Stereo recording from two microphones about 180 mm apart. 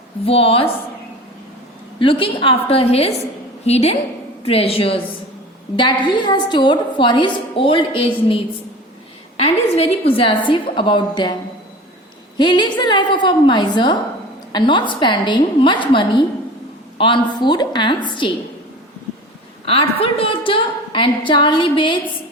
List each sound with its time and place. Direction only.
0.3 s a woman's voice: 30° left (ahead or behind)
2.0 s a woman's voice: 30° left (ahead or behind)
9.4 s a woman's voice: 35° left (ahead or behind)
12.4 s a woman's voice: 25° left (ahead or behind)
19.6 s a woman's voice: 30° left (ahead or behind)